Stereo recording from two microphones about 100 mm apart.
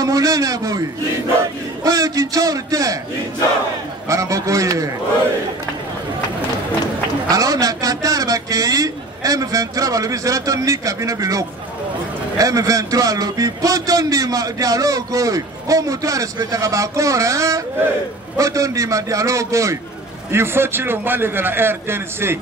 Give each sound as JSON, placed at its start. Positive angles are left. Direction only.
{"t": 0.0, "sound": "a man's voice", "side_deg": -35}
{"t": 4.1, "sound": "a man's voice", "side_deg": -35}
{"t": 7.2, "sound": "a man's voice", "side_deg": -40}